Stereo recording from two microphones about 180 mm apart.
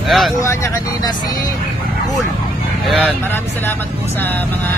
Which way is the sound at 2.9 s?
Centre (ahead or behind).